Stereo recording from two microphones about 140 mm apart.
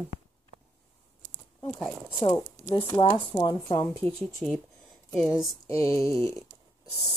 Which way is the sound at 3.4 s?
35° left (ahead or behind).